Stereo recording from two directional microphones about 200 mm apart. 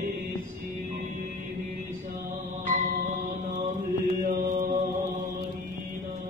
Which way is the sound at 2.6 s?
40° right (ahead or behind).